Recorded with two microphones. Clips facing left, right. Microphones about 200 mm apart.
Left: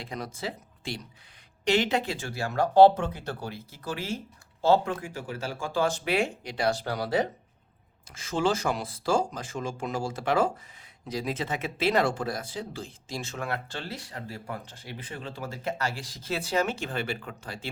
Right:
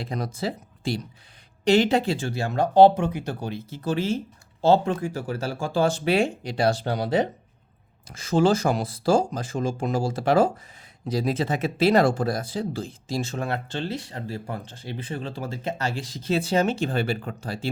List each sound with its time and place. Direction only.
0.0 s speech: 35° right (ahead or behind)
8.1 s speech: 35° right (ahead or behind)